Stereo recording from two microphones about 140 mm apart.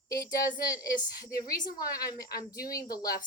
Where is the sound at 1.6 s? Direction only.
90° left.